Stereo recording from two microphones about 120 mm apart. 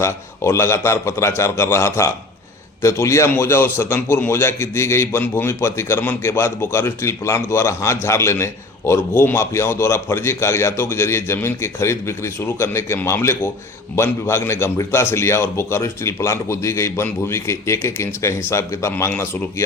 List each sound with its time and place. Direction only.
0.0 s a man's voice: 20° left (ahead or behind)